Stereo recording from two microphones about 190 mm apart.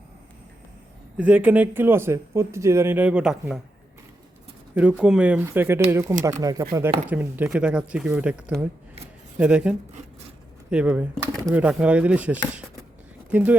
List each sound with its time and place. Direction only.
1.1 s speech: 10° right (ahead or behind)
4.7 s speech: 5° right (ahead or behind)